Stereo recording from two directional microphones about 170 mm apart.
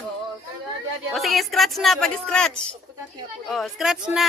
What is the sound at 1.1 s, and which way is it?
Speech, centre (ahead or behind).